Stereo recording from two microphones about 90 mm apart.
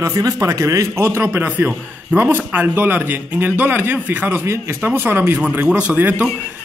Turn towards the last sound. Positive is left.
turn(degrees=-20)  # may be behind; listen again after turning